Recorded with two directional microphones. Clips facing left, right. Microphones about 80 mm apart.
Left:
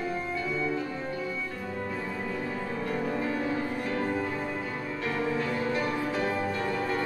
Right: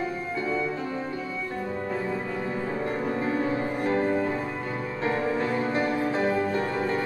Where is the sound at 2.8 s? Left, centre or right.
Right.